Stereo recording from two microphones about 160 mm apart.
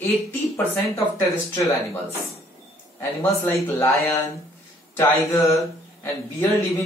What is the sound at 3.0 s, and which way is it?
A man's voice, 20° left (ahead or behind).